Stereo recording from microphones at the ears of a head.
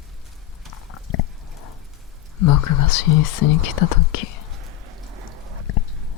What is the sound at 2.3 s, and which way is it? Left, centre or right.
Speech, left.